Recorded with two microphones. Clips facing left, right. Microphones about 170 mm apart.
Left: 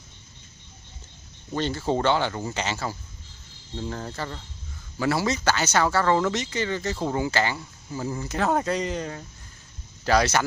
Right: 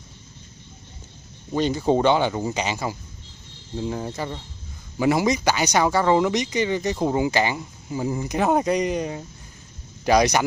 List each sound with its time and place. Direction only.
1.5 s speech: 15° right (ahead or behind)